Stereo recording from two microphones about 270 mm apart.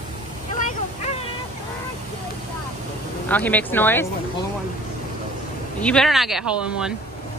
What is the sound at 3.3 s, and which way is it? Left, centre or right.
Speech, centre.